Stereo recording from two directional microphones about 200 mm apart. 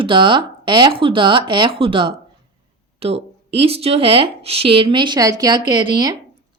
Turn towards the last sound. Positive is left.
turn(degrees=-20)  # may be behind; listen again after turning